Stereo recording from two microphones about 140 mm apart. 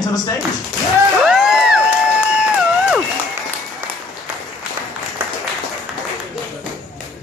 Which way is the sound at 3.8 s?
15° right (ahead or behind).